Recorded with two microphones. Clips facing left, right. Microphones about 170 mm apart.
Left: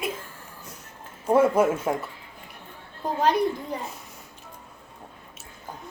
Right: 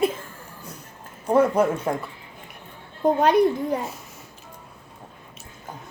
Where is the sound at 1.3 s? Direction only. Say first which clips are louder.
Right 1 dB; 5° left (ahead or behind).